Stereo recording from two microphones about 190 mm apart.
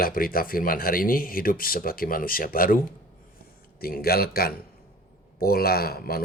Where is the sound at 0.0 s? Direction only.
50° left (ahead or behind).